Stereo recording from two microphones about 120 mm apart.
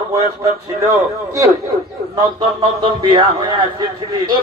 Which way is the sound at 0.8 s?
25° right (ahead or behind).